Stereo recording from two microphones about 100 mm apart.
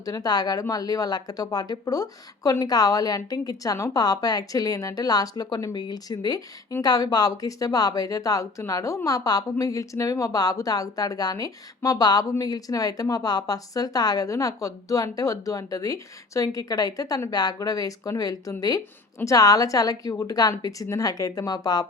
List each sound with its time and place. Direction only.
0.0 s speech: 40° left (ahead or behind)